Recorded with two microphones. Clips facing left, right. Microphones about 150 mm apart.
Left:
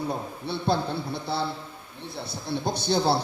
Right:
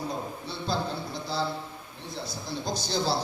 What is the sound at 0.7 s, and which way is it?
A man's voice, 60° left (ahead or behind).